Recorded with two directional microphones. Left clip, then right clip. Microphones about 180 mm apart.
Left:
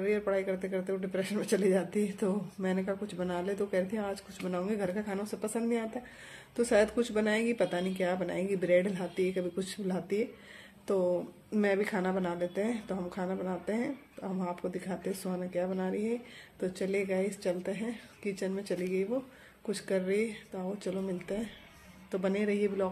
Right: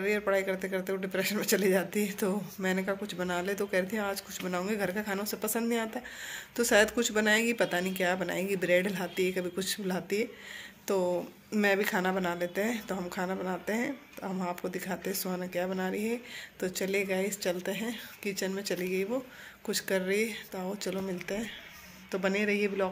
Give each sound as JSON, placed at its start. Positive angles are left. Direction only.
{"t": 0.0, "sound": "speech", "side_deg": 5}